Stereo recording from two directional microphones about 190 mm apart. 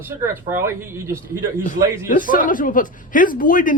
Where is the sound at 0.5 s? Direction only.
15° right (ahead or behind).